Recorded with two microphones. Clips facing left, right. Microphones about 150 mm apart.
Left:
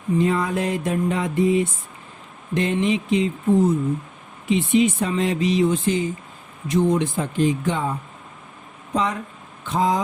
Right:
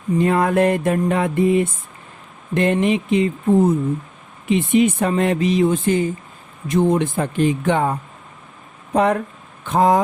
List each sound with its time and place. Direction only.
0.2 s speech: 60° right (ahead or behind)